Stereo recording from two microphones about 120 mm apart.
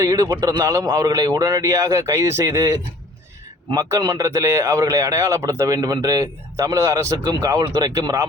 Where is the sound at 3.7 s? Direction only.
30° right (ahead or behind).